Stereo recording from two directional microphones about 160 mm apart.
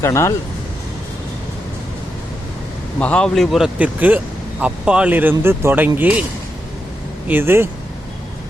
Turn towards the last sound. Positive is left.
turn(degrees=-15)  # may be behind; listen again after turning